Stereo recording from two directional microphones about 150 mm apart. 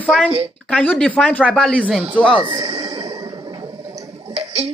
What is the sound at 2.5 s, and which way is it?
Speech, 35° right (ahead or behind).